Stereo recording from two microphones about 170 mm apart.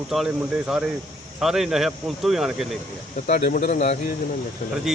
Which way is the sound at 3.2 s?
55° left (ahead or behind).